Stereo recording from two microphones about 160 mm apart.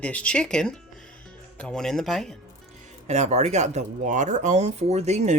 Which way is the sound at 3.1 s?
45° right (ahead or behind).